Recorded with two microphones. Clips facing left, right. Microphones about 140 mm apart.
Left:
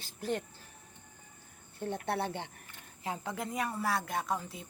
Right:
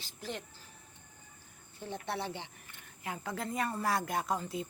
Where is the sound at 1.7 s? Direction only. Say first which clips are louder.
Left 4 dB; 55° left (ahead or behind).